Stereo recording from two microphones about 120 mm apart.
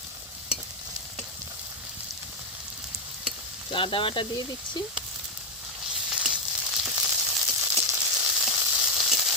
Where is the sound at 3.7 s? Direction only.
45° left (ahead or behind).